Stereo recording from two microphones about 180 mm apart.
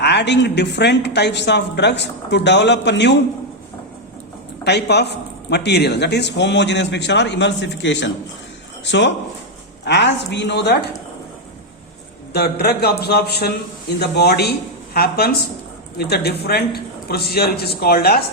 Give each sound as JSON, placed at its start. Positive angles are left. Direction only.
{"t": 0.0, "sound": "speech", "side_deg": 70}
{"t": 4.6, "sound": "speech", "side_deg": 65}
{"t": 12.3, "sound": "a man's voice", "side_deg": 60}